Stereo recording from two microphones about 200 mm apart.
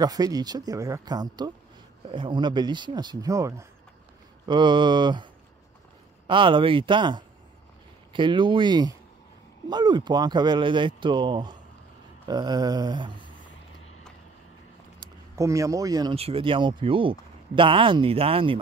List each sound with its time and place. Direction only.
0.0 s speech: 20° right (ahead or behind)
15.3 s speech: 15° right (ahead or behind)